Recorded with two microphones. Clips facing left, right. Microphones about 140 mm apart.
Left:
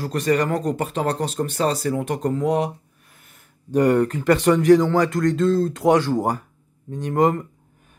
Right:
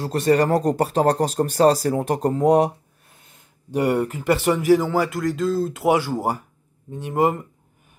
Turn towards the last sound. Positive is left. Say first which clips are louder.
# left 2 dB
turn(degrees=-10)  # may be behind; listen again after turning